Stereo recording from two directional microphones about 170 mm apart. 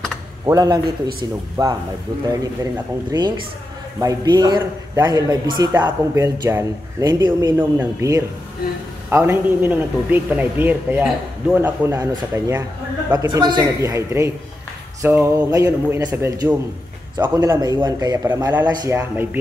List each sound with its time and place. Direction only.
0.5 s a man's voice: 25° right (ahead or behind)